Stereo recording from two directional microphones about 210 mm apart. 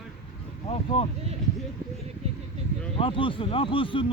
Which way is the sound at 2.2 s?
30° right (ahead or behind).